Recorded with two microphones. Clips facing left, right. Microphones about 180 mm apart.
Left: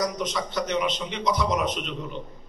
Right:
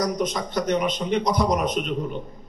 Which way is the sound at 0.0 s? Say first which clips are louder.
Right 3 dB; 45° right (ahead or behind).